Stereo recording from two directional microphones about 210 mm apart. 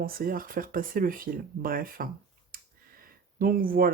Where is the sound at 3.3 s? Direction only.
40° right (ahead or behind).